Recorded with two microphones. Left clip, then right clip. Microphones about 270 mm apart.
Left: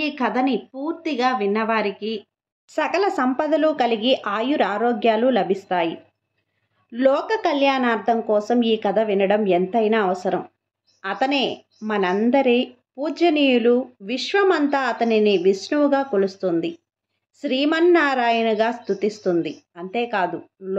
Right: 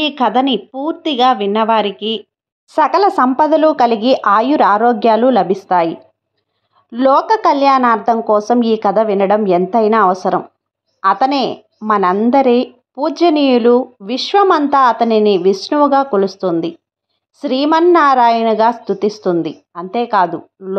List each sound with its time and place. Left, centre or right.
0.1 s a woman's voice: centre